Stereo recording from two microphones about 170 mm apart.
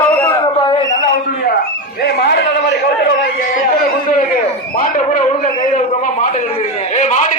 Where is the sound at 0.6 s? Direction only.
25° left (ahead or behind).